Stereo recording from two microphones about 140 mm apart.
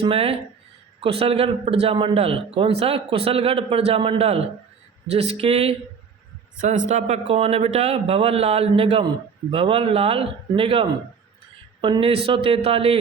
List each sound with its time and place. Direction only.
0.0 s a man's voice: 45° right (ahead or behind)
6.6 s a man's voice: 55° right (ahead or behind)